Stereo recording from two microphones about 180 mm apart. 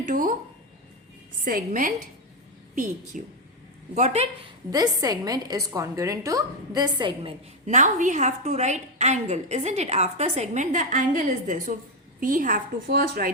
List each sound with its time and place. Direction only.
0.0 s speech: 50° right (ahead or behind)
1.5 s a woman's voice: 50° right (ahead or behind)
3.1 s a woman's voice: 50° right (ahead or behind)
4.7 s a woman's voice: 20° right (ahead or behind)
7.7 s a woman's voice: 45° right (ahead or behind)